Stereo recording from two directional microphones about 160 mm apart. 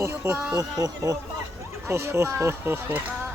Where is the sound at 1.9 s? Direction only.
15° right (ahead or behind).